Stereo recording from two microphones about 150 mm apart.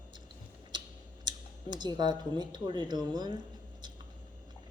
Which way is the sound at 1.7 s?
30° right (ahead or behind).